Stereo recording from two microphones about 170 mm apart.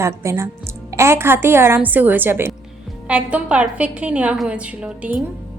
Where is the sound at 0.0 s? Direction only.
15° right (ahead or behind).